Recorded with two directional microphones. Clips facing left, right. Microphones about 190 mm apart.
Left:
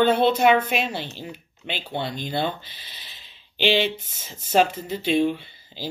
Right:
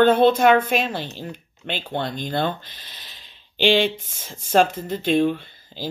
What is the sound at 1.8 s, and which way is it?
Speech, 10° left (ahead or behind).